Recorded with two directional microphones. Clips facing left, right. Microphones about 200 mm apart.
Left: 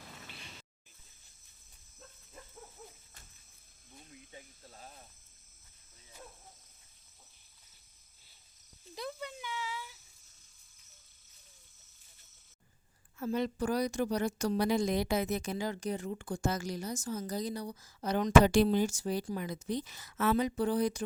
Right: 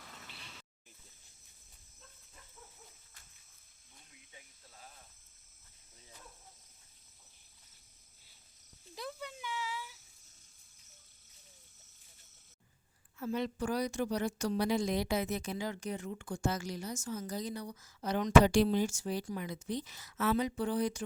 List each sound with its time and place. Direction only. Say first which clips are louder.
4.1 s snake: left 8 dB; 40° left (ahead or behind)
9.0 s a sound: left 2 dB; 5° right (ahead or behind)
13.1 s a woman's voice: left 3 dB; 40° left (ahead or behind)
18.4 s a woman's voice: left 2 dB; 50° left (ahead or behind)